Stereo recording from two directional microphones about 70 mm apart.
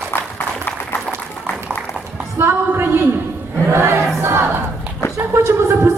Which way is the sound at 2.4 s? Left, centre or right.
Right.